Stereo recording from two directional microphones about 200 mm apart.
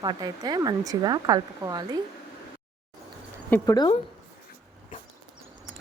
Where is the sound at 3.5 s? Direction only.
10° left (ahead or behind).